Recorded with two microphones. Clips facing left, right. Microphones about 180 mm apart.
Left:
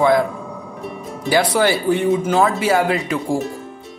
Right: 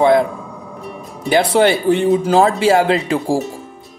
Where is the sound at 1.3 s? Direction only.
25° right (ahead or behind).